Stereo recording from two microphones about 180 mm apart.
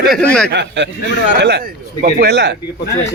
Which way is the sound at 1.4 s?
65° right (ahead or behind).